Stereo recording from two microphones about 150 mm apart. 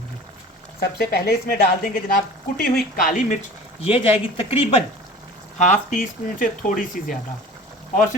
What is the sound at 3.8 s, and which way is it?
Speech, 40° left (ahead or behind).